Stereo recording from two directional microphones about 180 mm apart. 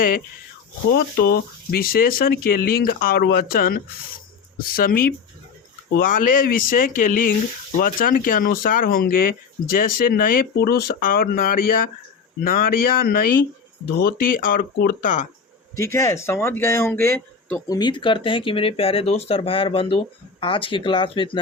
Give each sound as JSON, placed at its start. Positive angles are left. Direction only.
{"t": 0.9, "sound": "speech", "side_deg": 60}
{"t": 15.7, "sound": "speech", "side_deg": 15}
{"t": 17.7, "sound": "speech", "side_deg": 25}